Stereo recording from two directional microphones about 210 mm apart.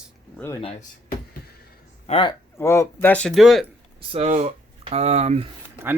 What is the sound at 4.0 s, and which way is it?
Speech, 30° right (ahead or behind).